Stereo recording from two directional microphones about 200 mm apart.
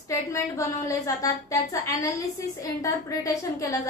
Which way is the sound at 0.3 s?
15° left (ahead or behind).